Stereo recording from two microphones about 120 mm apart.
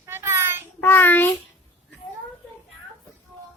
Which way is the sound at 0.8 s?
15° left (ahead or behind).